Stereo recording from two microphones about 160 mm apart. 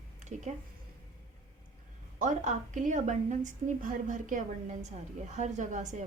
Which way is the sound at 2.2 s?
50° right (ahead or behind).